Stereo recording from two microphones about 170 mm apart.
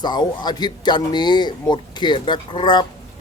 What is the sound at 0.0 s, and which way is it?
Speech, 25° left (ahead or behind).